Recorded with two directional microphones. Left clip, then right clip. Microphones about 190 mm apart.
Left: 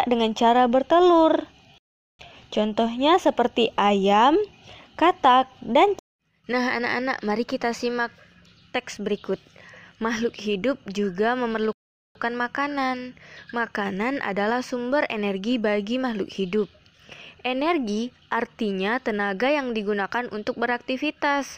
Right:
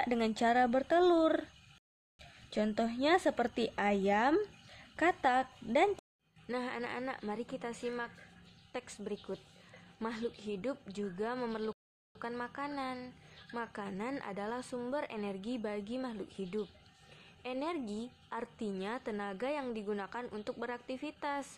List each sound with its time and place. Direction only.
0.0 s a woman's voice: 15° left (ahead or behind)
2.5 s a woman's voice: 10° left (ahead or behind)
4.9 s a sound: 20° left (ahead or behind)
6.5 s a woman's voice: 35° left (ahead or behind)